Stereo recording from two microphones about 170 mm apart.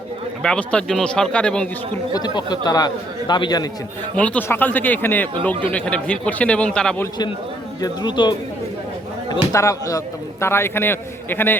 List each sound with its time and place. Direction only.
0.4 s speech: 5° left (ahead or behind)
2.1 s a man's voice: 25° left (ahead or behind)
4.1 s speech: 10° left (ahead or behind)
7.8 s a man's voice: 25° left (ahead or behind)
9.5 s a man's voice: 20° left (ahead or behind)